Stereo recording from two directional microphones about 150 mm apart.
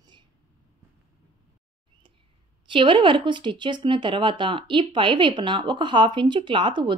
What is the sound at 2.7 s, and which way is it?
Speech, 35° right (ahead or behind).